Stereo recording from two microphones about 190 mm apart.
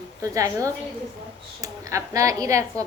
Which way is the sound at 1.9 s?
15° right (ahead or behind).